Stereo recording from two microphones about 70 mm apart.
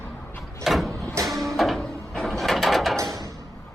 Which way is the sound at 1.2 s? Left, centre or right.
Centre.